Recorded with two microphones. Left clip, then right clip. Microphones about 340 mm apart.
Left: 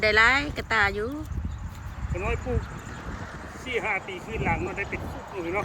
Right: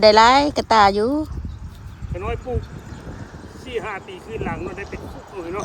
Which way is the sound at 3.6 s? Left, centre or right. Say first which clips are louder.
Even; centre.